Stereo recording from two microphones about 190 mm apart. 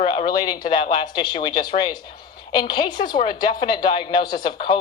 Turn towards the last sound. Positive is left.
turn(degrees=25)  # may be behind; listen again after turning